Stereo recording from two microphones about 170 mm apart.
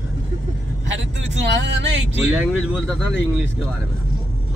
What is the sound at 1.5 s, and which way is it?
Speech, 90° right.